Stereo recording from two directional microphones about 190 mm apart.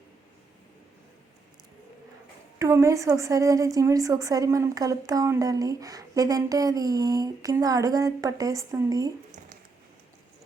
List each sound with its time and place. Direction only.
2.6 s a woman's voice: 15° right (ahead or behind)